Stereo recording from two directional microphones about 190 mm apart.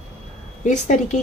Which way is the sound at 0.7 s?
40° left (ahead or behind).